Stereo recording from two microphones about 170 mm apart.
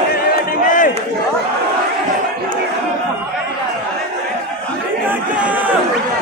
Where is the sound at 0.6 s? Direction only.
50° left (ahead or behind).